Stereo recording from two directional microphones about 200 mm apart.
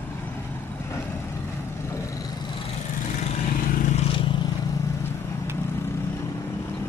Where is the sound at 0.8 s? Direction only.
15° left (ahead or behind).